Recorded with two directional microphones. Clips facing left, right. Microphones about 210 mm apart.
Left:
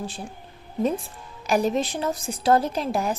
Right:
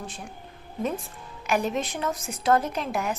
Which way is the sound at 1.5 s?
35° left (ahead or behind).